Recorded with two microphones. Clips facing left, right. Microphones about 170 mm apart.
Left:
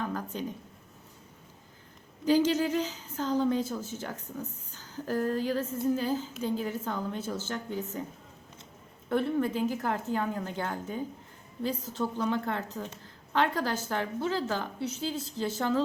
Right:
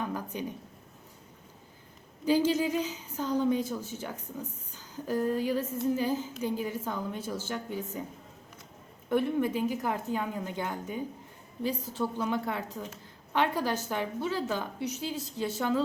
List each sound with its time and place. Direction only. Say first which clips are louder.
0.3 s a woman's voice: even; 15° right (ahead or behind)
2.2 s a woman's voice: left 1 dB; 15° right (ahead or behind)
9.0 s a woman's voice: even; 15° right (ahead or behind)